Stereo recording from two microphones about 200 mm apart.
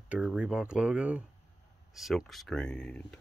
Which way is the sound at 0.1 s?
5° right (ahead or behind).